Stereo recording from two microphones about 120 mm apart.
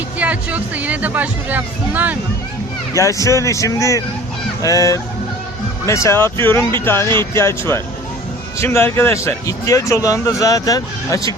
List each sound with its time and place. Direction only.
0.2 s speech: 10° right (ahead or behind)
2.9 s speech: 25° left (ahead or behind)